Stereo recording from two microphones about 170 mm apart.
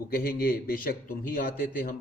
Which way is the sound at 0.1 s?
60° left (ahead or behind).